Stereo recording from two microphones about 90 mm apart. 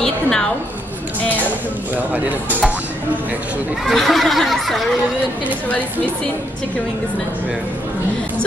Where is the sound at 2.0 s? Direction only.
20° right (ahead or behind).